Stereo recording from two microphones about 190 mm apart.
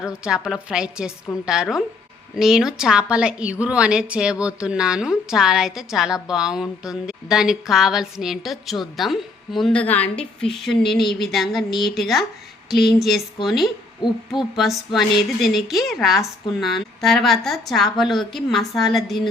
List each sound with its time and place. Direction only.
0.0 s speech: 5° right (ahead or behind)
14.0 s hoot: 25° left (ahead or behind)
14.5 s speech: centre (ahead or behind)